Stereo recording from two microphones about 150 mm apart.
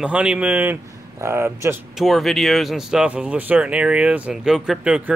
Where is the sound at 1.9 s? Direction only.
Centre (ahead or behind).